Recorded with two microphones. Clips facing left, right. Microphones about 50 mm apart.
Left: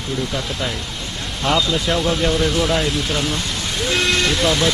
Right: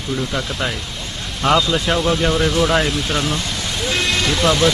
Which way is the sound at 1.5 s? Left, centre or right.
Centre.